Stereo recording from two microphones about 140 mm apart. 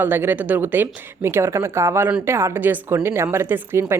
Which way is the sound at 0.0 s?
15° right (ahead or behind).